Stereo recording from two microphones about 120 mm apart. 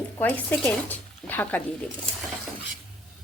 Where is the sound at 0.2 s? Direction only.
15° left (ahead or behind).